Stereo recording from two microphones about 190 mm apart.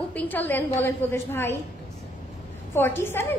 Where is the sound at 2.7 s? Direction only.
10° left (ahead or behind).